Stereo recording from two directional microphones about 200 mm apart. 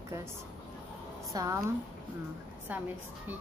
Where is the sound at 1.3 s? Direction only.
15° right (ahead or behind).